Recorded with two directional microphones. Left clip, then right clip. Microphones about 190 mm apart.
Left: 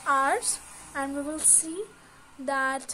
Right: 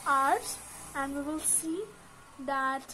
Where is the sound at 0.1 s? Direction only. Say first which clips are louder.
Left 2 dB; 50° left (ahead or behind).